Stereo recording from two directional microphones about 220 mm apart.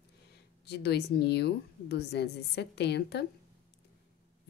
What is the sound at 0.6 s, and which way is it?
A woman's voice, 50° left (ahead or behind).